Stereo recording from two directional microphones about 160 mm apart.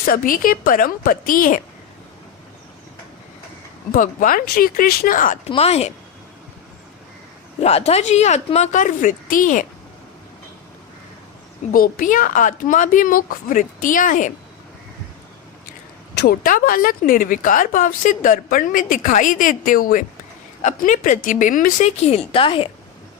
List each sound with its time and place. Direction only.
0.0 s speech: 65° left (ahead or behind)
3.9 s speech: 60° left (ahead or behind)
5.5 s speech: 40° left (ahead or behind)
7.6 s speech: 40° left (ahead or behind)
11.7 s speech: 60° left (ahead or behind)
16.1 s speech: 65° left (ahead or behind)
22.0 s speech: 35° left (ahead or behind)